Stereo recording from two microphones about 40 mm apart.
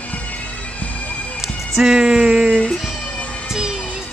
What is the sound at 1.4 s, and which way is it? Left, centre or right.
Speech, centre.